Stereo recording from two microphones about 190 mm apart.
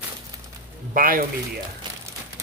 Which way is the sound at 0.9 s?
50° right (ahead or behind).